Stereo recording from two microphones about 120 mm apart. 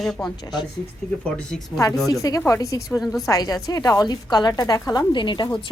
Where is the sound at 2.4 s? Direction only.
25° left (ahead or behind).